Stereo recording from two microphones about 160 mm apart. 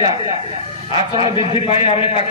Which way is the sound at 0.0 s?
35° left (ahead or behind).